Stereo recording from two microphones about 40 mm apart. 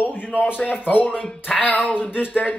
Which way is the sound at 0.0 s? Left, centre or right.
Left.